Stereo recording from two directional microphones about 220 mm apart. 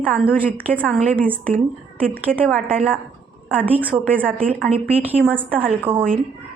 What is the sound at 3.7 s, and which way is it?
Speech, 5° right (ahead or behind).